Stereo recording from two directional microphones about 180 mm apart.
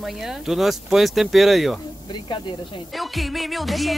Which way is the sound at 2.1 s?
25° left (ahead or behind).